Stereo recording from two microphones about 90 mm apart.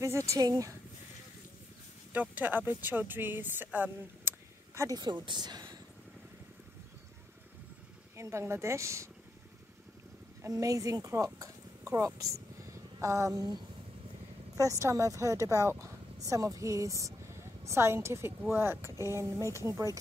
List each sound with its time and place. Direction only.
0.0 s speech: 30° right (ahead or behind)
0.4 s speech: 40° right (ahead or behind)
2.1 s speech: 20° right (ahead or behind)
4.7 s speech: 40° right (ahead or behind)
5.2 s speech: 55° right (ahead or behind)
8.2 s speech: 30° right (ahead or behind)
10.4 s speech: 40° right (ahead or behind)
14.6 s speech: 35° right (ahead or behind)